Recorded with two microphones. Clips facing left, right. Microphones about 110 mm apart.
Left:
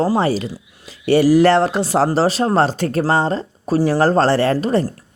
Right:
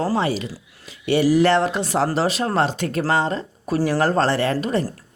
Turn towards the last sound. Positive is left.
turn(degrees=35)  # may be behind; listen again after turning